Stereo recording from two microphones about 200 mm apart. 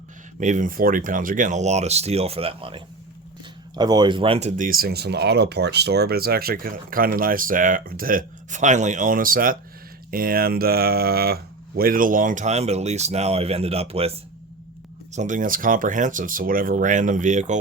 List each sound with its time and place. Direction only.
0.3 s speech: 40° right (ahead or behind)